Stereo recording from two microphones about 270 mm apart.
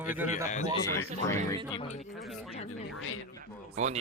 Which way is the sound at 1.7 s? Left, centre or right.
Left.